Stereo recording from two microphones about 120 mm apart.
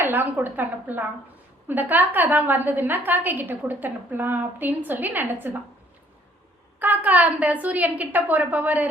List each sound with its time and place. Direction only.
0.0 s a woman's voice: 15° right (ahead or behind)
6.7 s a woman's voice: 15° right (ahead or behind)